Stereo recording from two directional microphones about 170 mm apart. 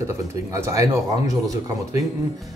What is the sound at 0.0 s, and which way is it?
Speech, 15° right (ahead or behind).